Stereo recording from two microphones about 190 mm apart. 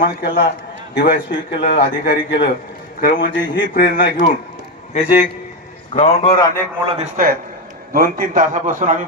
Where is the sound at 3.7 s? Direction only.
50° left (ahead or behind).